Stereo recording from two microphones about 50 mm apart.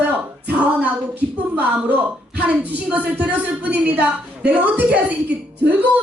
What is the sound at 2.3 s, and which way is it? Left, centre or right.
A woman's voice, right.